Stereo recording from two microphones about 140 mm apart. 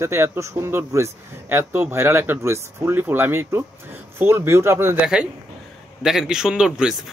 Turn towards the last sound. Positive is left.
turn(degrees=-5)  # may be behind; listen again after turning